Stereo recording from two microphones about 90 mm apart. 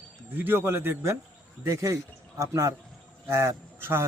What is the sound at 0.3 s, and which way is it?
A man's voice, 25° right (ahead or behind).